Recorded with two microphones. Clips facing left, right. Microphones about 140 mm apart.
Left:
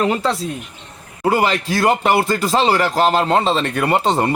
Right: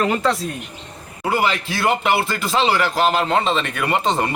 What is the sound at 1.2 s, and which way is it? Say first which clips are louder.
Speech: left 4 dB; 40° left (ahead or behind).